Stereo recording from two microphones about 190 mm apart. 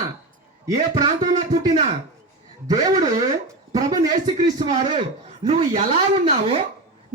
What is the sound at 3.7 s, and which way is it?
Speech, 20° right (ahead or behind).